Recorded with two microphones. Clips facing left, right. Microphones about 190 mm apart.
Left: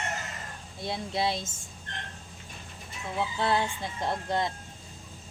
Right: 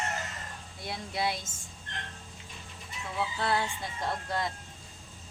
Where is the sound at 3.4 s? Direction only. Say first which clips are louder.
Left 4 dB; 20° left (ahead or behind).